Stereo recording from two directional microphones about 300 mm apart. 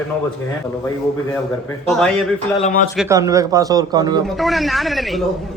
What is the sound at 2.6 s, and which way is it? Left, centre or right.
Speech, left.